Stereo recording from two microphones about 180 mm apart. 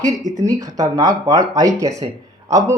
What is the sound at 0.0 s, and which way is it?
Speech, 20° right (ahead or behind).